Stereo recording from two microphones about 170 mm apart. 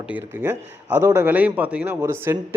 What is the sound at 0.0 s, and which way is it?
A man's voice, 10° right (ahead or behind).